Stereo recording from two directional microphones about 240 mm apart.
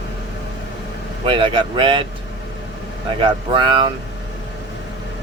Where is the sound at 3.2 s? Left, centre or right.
Right.